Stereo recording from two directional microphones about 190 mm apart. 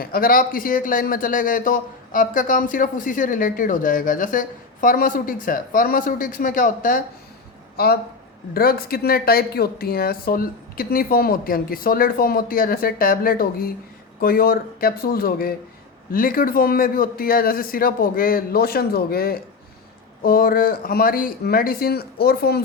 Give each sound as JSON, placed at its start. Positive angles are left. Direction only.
{"t": 0.0, "sound": "speech", "side_deg": 50}